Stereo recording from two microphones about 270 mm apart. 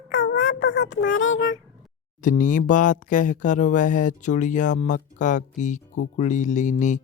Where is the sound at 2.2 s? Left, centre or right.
Left.